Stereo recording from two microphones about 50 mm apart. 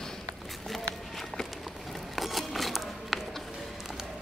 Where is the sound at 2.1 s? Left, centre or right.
Centre.